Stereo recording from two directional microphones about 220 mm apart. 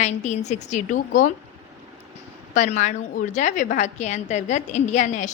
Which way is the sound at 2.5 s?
30° left (ahead or behind).